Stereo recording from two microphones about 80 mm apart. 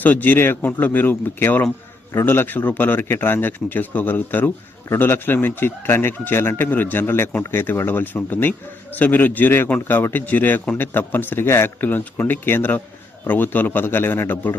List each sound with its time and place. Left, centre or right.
0.0 s speech: left